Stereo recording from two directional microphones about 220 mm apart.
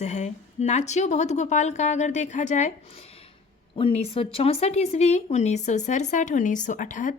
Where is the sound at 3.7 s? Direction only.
25° left (ahead or behind).